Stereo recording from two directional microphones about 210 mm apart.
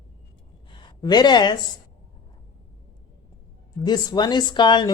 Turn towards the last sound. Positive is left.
turn(degrees=20)  # may be behind; listen again after turning